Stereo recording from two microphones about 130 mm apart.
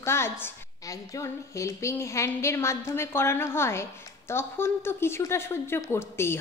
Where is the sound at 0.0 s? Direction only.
20° left (ahead or behind).